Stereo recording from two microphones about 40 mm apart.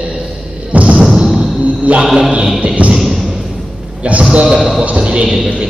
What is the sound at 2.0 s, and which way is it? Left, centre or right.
Speech, centre.